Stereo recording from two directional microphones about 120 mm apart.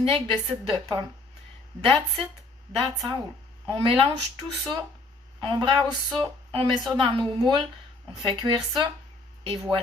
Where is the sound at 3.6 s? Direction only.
45° right (ahead or behind).